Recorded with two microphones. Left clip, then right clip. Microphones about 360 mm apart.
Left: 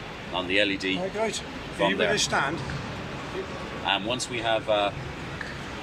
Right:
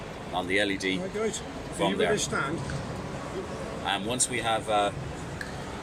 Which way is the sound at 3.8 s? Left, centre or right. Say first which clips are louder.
Left 3 dB; centre.